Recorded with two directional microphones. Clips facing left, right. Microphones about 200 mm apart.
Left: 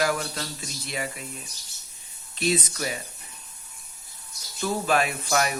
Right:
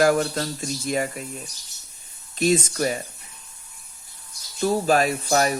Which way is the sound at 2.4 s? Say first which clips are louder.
Right 6 dB; 45° right (ahead or behind).